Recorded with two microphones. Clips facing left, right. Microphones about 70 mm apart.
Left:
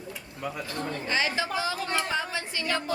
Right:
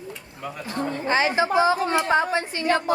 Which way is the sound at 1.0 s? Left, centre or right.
Right.